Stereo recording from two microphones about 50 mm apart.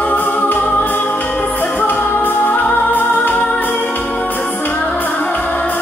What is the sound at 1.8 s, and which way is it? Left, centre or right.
Music, left.